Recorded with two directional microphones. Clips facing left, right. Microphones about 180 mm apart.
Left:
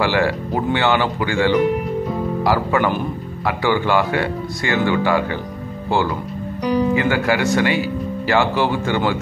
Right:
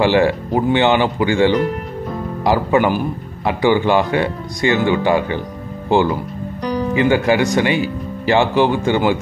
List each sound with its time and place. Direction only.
0.0 s speech: 20° right (ahead or behind)
6.6 s music: 10° left (ahead or behind)
7.0 s speech: 20° right (ahead or behind)